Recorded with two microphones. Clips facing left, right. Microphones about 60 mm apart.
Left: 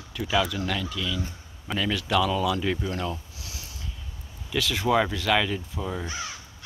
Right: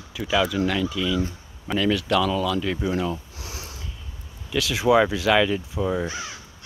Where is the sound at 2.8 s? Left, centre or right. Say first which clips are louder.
Right 5 dB; centre.